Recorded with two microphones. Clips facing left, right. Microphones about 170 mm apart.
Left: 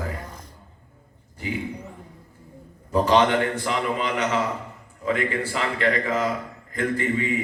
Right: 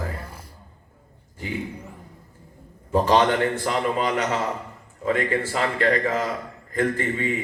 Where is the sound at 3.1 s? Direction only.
40° right (ahead or behind).